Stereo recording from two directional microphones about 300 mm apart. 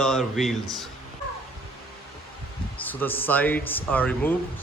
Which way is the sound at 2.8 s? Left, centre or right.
Centre.